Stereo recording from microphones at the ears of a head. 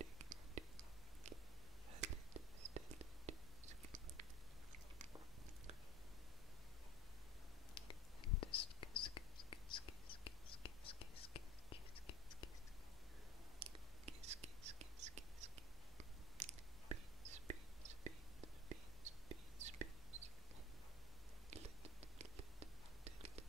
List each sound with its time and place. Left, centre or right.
0.0 s whispering: right
1.9 s a sound: right
7.7 s whispering: left
13.6 s whispering: right
21.5 s whispering: right